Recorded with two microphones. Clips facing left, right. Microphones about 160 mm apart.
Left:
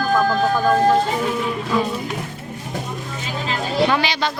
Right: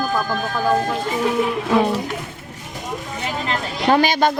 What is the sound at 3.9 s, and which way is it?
Speech, 45° right (ahead or behind).